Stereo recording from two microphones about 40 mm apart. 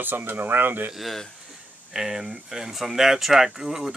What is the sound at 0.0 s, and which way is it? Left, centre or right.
Speech, right.